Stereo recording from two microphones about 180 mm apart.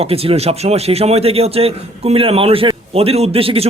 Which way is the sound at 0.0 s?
35° right (ahead or behind).